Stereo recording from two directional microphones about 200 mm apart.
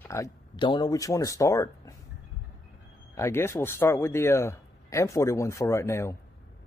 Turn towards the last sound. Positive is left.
turn(degrees=15)  # may be behind; listen again after turning